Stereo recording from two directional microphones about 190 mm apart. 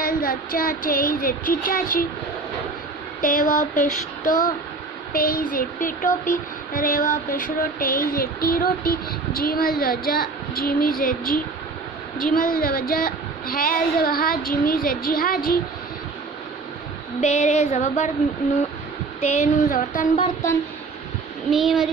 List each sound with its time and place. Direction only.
0.0 s speech: 50° left (ahead or behind)
3.2 s speech: 45° left (ahead or behind)
17.2 s a sound: 40° left (ahead or behind)
19.2 s speech: 40° left (ahead or behind)
21.5 s speech: centre (ahead or behind)